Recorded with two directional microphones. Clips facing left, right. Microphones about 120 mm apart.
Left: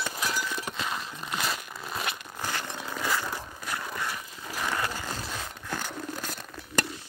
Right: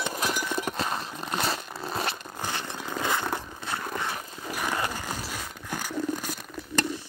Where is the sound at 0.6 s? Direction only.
45° right (ahead or behind); by 3.3 s 20° right (ahead or behind).